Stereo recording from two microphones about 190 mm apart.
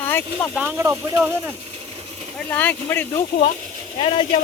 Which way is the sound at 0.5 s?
10° right (ahead or behind).